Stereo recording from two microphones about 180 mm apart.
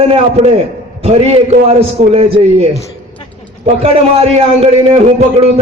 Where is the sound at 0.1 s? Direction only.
35° right (ahead or behind).